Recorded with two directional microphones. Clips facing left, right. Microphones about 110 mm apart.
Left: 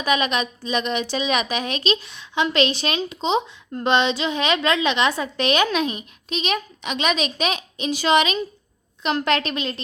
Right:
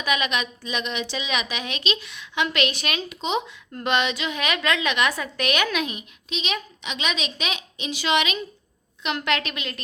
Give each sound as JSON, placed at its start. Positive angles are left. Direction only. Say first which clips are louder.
{"t": 0.0, "sound": "a woman's voice", "louder": "left 4 dB", "side_deg": 35}